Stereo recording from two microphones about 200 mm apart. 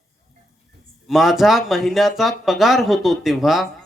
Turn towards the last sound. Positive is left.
turn(degrees=0)  # may be behind; listen again after turning